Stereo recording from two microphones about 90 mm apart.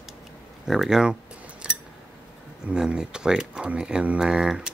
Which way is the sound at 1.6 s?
10° right (ahead or behind).